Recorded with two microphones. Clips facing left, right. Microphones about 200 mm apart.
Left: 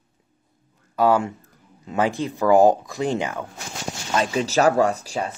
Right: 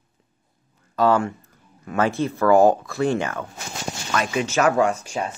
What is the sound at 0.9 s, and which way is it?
Speech, 10° left (ahead or behind).